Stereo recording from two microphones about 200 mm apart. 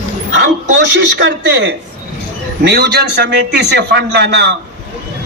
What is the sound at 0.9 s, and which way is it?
A man's voice, 60° right (ahead or behind).